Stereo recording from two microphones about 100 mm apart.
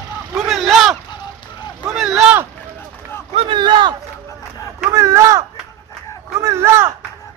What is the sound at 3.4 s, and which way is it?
Battle cry, 55° right (ahead or behind).